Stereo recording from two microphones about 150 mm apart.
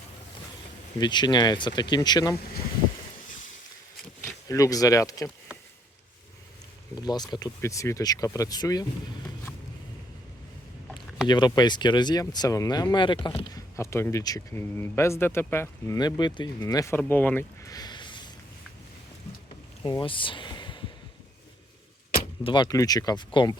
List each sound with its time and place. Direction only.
0.9 s speech: 30° left (ahead or behind)
4.4 s speech: 20° left (ahead or behind)
6.9 s speech: 25° left (ahead or behind)
11.3 s speech: 30° left (ahead or behind)
13.7 s speech: 20° left (ahead or behind)
16.0 s speech: 30° left (ahead or behind)
17.0 s speech: 10° left (ahead or behind); by 18.3 s 30° left (ahead or behind)
19.8 s speech: 30° left (ahead or behind)
22.4 s speech: 30° left (ahead or behind)